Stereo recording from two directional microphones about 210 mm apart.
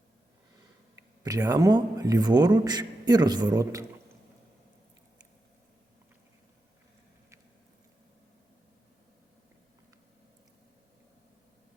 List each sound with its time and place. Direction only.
1.2 s a man's voice: 15° right (ahead or behind)